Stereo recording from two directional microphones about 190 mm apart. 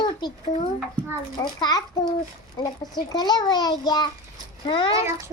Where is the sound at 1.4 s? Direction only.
20° left (ahead or behind).